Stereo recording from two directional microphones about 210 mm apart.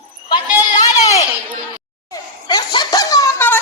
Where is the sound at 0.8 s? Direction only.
15° left (ahead or behind).